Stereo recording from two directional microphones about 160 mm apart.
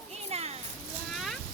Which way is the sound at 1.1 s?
Centre (ahead or behind).